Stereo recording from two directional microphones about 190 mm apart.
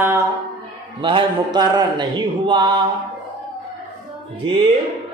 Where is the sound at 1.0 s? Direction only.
25° right (ahead or behind).